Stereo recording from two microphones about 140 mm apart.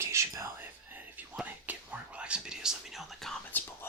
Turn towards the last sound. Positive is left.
turn(degrees=15)  # may be behind; listen again after turning